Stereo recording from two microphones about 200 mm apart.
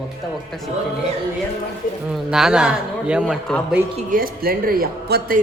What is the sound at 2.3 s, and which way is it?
A man's voice, 5° right (ahead or behind).